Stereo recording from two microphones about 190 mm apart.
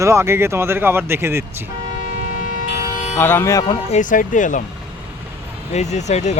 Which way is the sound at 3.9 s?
40° left (ahead or behind).